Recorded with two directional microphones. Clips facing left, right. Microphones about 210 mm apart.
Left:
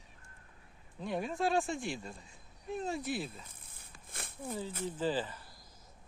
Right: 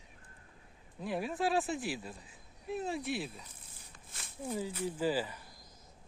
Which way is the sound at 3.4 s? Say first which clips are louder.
Right 1 dB; 55° left (ahead or behind).